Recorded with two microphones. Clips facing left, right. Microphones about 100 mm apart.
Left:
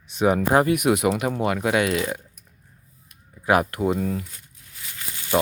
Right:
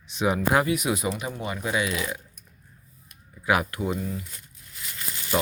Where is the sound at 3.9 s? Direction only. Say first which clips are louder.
Left 6 dB; 85° left.